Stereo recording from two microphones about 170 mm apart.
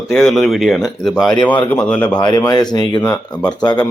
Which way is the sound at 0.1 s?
Centre (ahead or behind).